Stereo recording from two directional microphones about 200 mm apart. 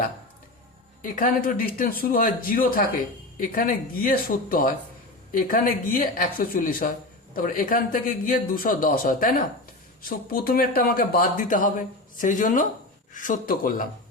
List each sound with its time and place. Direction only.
1.0 s speech: 45° left (ahead or behind)